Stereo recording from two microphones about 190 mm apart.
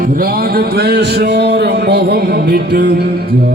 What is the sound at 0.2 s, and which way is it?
Speech, 50° right (ahead or behind).